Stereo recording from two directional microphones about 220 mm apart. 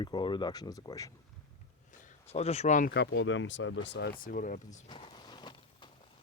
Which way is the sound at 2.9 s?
50° left (ahead or behind).